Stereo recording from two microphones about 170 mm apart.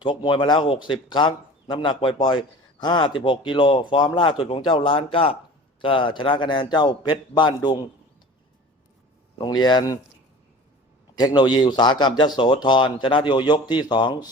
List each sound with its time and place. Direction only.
0.0 s speech: 30° left (ahead or behind)
9.4 s speech: 25° left (ahead or behind)
11.1 s speech: 25° left (ahead or behind)